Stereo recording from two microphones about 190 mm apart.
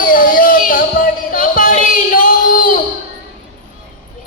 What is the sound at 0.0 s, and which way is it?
Music, 45° left (ahead or behind).